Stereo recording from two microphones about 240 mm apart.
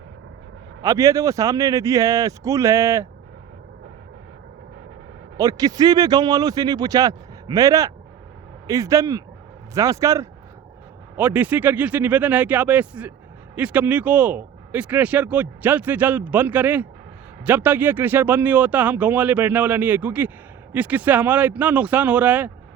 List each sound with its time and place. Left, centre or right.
0.8 s speech: centre
5.4 s speech: centre